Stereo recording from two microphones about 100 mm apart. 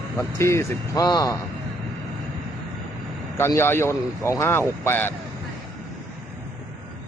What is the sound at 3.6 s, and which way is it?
Speech, 25° left (ahead or behind).